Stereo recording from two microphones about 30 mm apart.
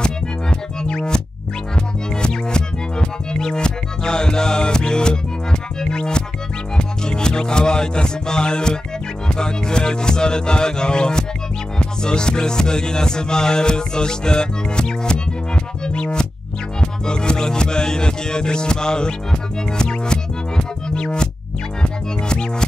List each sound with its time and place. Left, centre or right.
0.0 s music: left
2.2 s music: left